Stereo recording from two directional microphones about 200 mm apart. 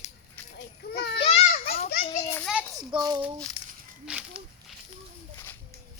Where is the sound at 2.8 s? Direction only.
20° right (ahead or behind).